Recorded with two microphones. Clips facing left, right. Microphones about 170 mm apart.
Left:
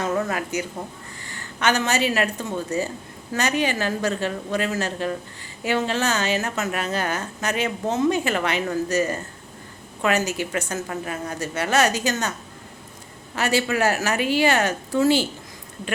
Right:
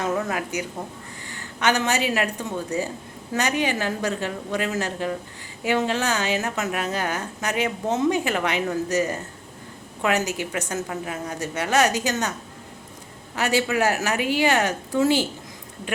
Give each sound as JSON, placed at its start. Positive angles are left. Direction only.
{"t": 0.3, "sound": "a woman's voice", "side_deg": -15}
{"t": 13.3, "sound": "a woman's voice", "side_deg": -15}